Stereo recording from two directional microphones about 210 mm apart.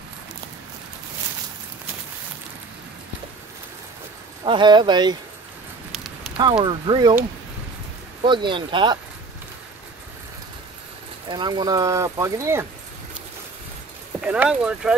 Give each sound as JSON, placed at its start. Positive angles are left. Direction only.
{"t": 4.5, "sound": "speech", "side_deg": -20}
{"t": 6.3, "sound": "speech", "side_deg": -25}
{"t": 8.2, "sound": "speech", "side_deg": -20}
{"t": 11.2, "sound": "speech", "side_deg": -20}
{"t": 14.2, "sound": "speech", "side_deg": -5}